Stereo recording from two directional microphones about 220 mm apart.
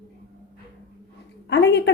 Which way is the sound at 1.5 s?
50° left (ahead or behind).